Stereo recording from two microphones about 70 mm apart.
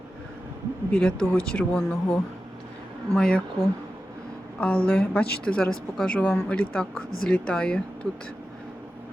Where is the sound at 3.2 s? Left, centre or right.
Centre.